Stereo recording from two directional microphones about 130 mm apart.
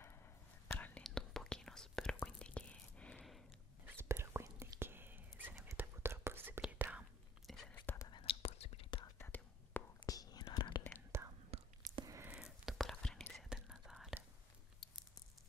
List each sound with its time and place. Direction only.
0.7 s whispering: 15° left (ahead or behind)
3.8 s whispering: 15° right (ahead or behind)
7.4 s whispering: 5° left (ahead or behind)
7.8 s whispering: 20° left (ahead or behind)
8.1 s whispering: 45° left (ahead or behind)
9.2 s whispering: 20° left (ahead or behind)
9.9 s whispering: 30° left (ahead or behind)
11.1 s whispering: 20° right (ahead or behind)
11.5 s whispering: 50° right (ahead or behind)
12.0 s a sound: 25° right (ahead or behind)
12.3 s whispering: 5° right (ahead or behind)